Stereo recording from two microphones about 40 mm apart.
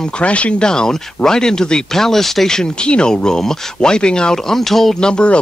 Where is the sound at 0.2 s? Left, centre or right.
Left.